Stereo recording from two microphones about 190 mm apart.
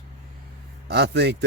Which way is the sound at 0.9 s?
65° right (ahead or behind).